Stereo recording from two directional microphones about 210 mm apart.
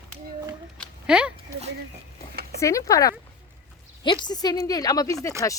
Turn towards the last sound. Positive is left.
turn(degrees=15)  # may be behind; listen again after turning